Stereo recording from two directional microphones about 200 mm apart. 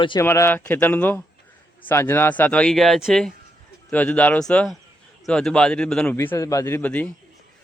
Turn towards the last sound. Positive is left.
turn(degrees=10)  # may be behind; listen again after turning